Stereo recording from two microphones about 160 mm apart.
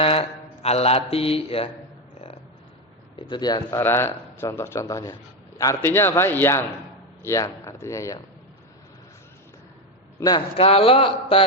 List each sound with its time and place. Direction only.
0.0 s music: 35° left (ahead or behind)
3.2 s a man's voice: 30° left (ahead or behind)
10.2 s a man's voice: 25° left (ahead or behind)
10.6 s a sound: 35° left (ahead or behind)